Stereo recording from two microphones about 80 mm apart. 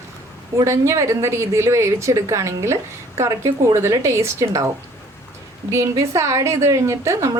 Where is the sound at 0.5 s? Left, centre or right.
Right.